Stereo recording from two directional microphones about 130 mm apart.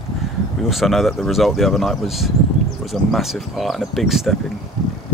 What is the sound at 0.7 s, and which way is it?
Speech, centre (ahead or behind).